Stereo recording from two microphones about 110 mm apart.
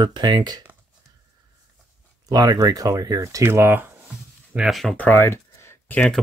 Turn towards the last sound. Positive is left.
turn(degrees=20)  # may be behind; listen again after turning